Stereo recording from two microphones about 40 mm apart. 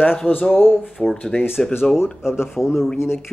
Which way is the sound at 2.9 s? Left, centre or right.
Left.